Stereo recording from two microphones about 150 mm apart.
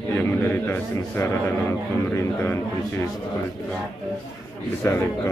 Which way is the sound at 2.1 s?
15° left (ahead or behind).